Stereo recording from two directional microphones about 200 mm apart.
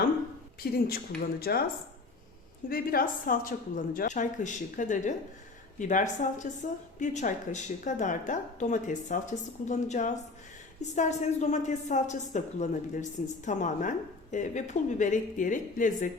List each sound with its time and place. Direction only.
0.6 s speech: 50° left (ahead or behind)
2.6 s a woman's voice: 50° left (ahead or behind)